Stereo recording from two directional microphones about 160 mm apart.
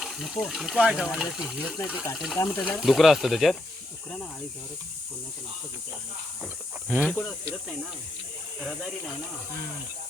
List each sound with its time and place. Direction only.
0.0 s speech: centre (ahead or behind)
6.4 s speech: 5° right (ahead or behind)
8.6 s speech: centre (ahead or behind)